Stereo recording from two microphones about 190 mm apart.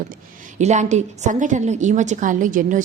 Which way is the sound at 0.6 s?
40° right (ahead or behind).